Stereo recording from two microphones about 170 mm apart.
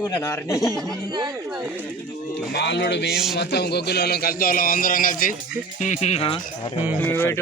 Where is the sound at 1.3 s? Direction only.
15° right (ahead or behind).